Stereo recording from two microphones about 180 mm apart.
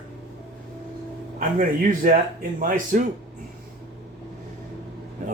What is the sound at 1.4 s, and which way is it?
Speech, 50° right (ahead or behind).